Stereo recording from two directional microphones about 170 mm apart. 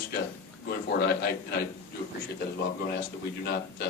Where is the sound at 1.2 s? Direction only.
70° left (ahead or behind).